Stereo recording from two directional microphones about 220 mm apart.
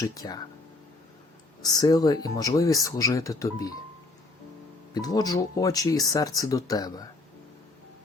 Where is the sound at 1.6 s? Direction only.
20° left (ahead or behind).